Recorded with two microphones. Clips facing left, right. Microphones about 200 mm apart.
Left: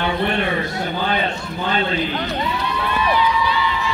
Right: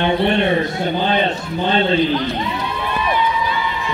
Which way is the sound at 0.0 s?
25° right (ahead or behind).